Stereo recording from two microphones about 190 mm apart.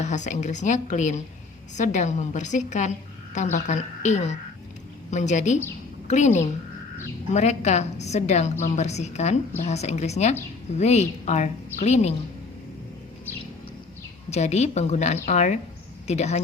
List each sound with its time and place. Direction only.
0.0 s a woman's voice: 40° left (ahead or behind)
14.3 s a woman's voice: 35° left (ahead or behind)